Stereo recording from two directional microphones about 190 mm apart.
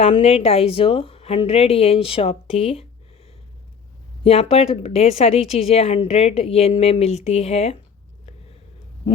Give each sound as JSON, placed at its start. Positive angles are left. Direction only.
{"t": 0.0, "sound": "speech", "side_deg": 30}
{"t": 4.2, "sound": "speech", "side_deg": 30}